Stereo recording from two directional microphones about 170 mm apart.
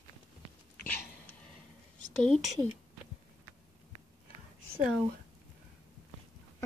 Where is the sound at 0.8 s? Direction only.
10° left (ahead or behind).